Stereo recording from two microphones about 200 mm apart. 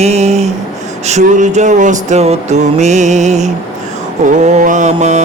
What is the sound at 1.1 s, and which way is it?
Mantra, 35° right (ahead or behind).